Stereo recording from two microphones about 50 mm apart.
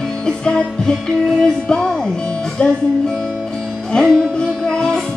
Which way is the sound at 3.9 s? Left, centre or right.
Centre.